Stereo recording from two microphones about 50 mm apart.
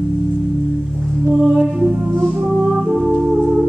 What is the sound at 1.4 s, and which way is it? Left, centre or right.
Music, centre.